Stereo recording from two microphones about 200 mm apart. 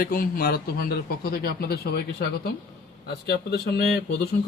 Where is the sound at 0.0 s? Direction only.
45° left (ahead or behind).